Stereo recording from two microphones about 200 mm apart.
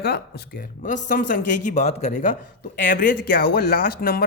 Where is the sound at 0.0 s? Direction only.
55° left (ahead or behind).